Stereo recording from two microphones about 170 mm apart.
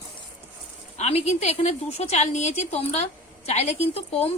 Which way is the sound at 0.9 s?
40° left (ahead or behind).